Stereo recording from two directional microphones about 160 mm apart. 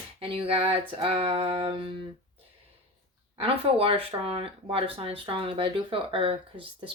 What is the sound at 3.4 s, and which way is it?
Speech, 35° right (ahead or behind).